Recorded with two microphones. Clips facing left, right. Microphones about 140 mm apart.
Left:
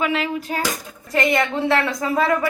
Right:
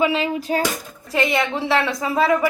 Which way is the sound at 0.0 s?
25° right (ahead or behind).